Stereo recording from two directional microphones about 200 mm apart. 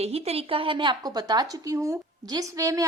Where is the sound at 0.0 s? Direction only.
30° right (ahead or behind).